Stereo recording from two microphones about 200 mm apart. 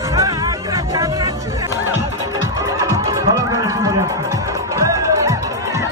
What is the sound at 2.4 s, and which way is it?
Music, 15° right (ahead or behind).